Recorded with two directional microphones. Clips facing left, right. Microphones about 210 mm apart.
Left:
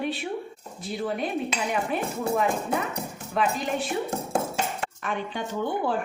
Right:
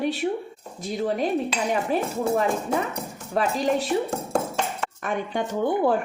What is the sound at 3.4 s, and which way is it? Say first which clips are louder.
Speech: right 4 dB; 40° right (ahead or behind).